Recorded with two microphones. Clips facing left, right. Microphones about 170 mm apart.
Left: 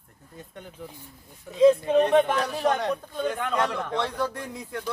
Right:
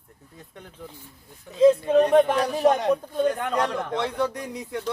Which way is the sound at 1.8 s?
5° right (ahead or behind).